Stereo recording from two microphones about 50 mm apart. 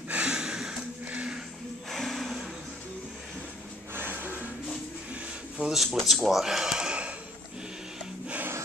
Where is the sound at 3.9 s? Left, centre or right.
Right.